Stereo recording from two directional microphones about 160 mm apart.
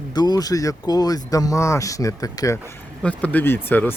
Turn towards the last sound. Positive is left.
turn(degrees=10)  # may be behind; listen again after turning